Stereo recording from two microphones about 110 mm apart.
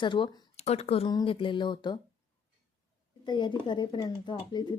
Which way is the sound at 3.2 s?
45° left (ahead or behind).